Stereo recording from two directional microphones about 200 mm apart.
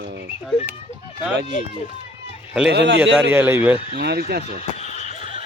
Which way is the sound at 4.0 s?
50° right (ahead or behind).